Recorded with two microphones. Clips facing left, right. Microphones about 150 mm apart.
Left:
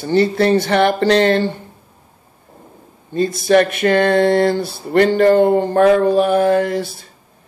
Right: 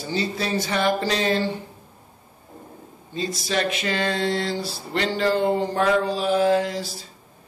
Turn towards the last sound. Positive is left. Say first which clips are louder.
# left 8 dB
turn(degrees=60)  # may be behind; listen again after turning